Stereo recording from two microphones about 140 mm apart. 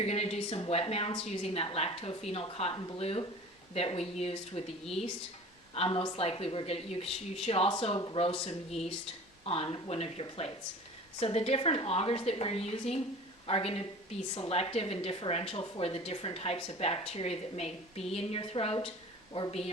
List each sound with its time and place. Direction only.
0.0 s a woman's voice: 45° left (ahead or behind)
5.7 s a woman's voice: 45° left (ahead or behind)